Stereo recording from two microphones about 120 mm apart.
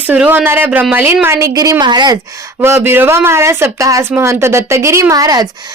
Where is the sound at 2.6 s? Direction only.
20° right (ahead or behind).